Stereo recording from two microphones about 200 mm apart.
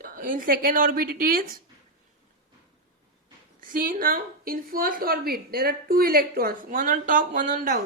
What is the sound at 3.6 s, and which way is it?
A woman's voice, 45° right (ahead or behind).